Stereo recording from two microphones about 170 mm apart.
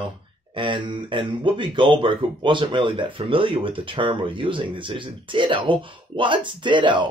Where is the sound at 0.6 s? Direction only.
30° right (ahead or behind).